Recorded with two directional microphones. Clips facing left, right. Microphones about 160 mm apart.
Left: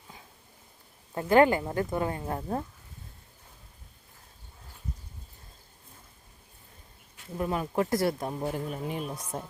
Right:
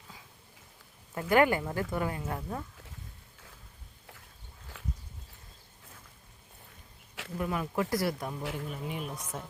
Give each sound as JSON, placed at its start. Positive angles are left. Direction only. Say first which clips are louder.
{"t": 1.1, "sound": "speech", "louder": "left 4 dB", "side_deg": 25}
{"t": 4.7, "sound": "a sound", "louder": "right 1 dB", "side_deg": -90}
{"t": 7.3, "sound": "speech", "louder": "left 3 dB", "side_deg": 30}
{"t": 8.5, "sound": "speech", "louder": "left 4 dB", "side_deg": 40}